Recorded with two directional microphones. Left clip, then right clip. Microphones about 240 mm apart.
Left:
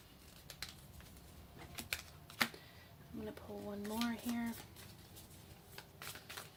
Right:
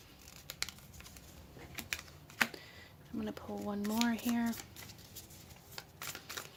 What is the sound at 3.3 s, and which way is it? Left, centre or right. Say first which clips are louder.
Speech: right 5 dB; right.